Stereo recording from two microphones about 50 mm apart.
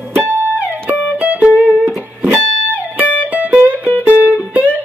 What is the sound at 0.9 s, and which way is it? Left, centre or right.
Music, right.